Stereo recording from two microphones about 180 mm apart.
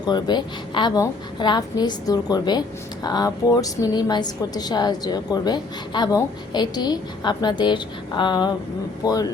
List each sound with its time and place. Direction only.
0.0 s a woman's voice: 25° left (ahead or behind)